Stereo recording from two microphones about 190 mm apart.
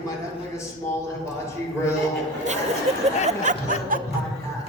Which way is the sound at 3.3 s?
40° right (ahead or behind).